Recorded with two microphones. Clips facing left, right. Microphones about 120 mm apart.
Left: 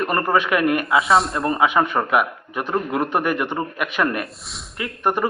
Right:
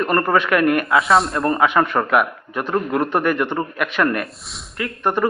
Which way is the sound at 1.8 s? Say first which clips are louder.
Right 2 dB; 15° left (ahead or behind).